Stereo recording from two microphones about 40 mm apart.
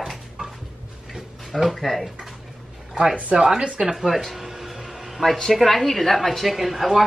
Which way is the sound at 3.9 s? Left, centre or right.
Centre.